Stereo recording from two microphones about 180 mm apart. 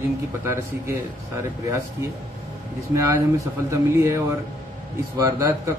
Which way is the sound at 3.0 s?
15° right (ahead or behind).